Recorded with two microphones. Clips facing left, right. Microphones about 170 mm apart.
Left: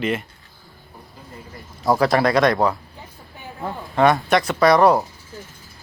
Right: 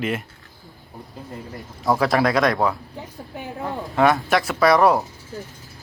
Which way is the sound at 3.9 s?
5° right (ahead or behind).